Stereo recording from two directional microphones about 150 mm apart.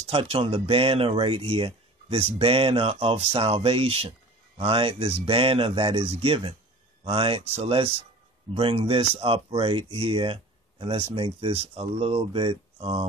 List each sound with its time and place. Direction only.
0.0 s speech: 35° right (ahead or behind)